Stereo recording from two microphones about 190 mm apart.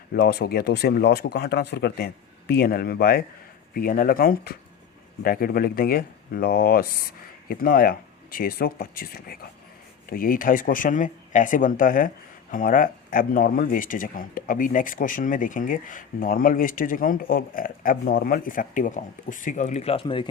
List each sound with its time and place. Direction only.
0.1 s speech: 55° left (ahead or behind); by 20.2 s 30° left (ahead or behind)